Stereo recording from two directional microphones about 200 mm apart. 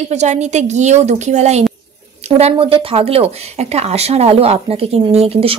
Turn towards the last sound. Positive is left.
turn(degrees=-30)  # may be behind; listen again after turning